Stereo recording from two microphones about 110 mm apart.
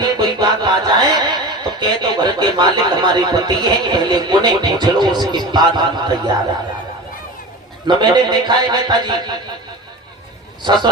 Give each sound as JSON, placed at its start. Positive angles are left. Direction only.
{"t": 0.0, "sound": "music", "side_deg": -40}
{"t": 7.9, "sound": "a man's voice", "side_deg": -40}